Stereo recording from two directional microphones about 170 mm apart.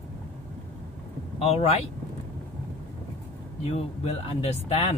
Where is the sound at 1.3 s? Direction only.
35° left (ahead or behind).